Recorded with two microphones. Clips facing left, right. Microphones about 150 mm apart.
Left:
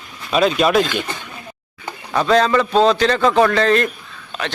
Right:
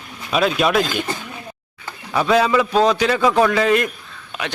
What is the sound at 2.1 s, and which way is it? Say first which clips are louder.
A man's voice: left 1 dB; 10° right (ahead or behind).